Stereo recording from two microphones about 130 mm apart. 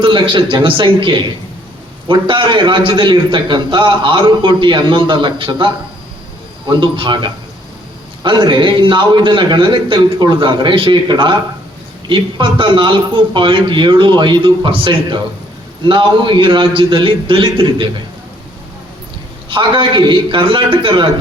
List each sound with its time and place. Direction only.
0.0 s a man's voice: 40° right (ahead or behind)
19.5 s a man's voice: 40° right (ahead or behind)